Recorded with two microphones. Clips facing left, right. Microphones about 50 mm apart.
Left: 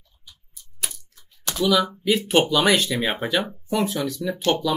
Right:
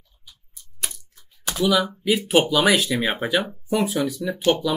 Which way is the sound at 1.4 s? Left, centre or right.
Centre.